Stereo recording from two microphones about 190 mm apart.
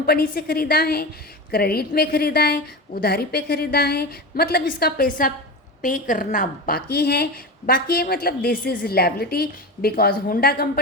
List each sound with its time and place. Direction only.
0.0 s a woman's voice: 55° left (ahead or behind)